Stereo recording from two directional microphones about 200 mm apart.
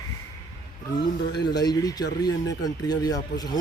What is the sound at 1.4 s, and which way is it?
Speech, 20° left (ahead or behind).